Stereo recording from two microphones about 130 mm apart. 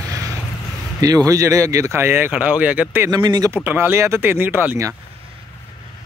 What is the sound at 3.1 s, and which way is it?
Speech, 35° right (ahead or behind).